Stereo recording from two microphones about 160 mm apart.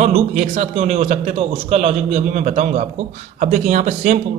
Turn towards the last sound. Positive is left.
turn(degrees=-45)  # may be behind; listen again after turning